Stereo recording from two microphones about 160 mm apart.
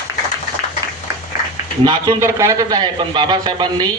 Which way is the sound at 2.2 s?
20° right (ahead or behind).